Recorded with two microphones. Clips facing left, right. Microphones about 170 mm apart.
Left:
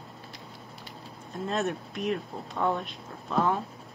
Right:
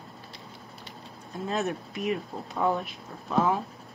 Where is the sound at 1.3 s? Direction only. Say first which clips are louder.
Even; centre (ahead or behind).